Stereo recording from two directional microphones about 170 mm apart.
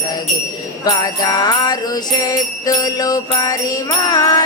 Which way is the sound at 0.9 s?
20° left (ahead or behind).